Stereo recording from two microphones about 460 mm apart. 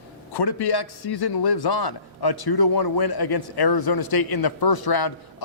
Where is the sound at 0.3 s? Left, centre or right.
Left.